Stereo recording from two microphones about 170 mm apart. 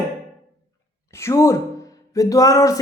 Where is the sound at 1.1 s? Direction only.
15° left (ahead or behind).